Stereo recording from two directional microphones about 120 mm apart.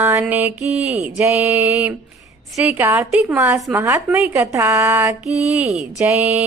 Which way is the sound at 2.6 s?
10° right (ahead or behind).